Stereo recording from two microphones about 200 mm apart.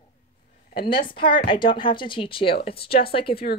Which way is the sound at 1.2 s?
25° left (ahead or behind).